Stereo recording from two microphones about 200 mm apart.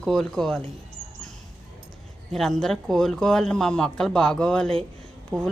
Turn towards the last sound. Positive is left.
turn(degrees=-20)  # may be behind; listen again after turning